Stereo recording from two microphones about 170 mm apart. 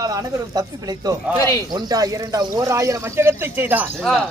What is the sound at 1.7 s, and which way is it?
A man's voice, 20° right (ahead or behind).